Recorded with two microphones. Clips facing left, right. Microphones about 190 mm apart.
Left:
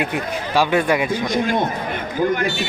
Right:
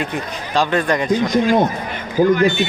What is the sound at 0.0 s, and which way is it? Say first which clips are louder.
A man's voice: left 1 dB; 10° left (ahead or behind).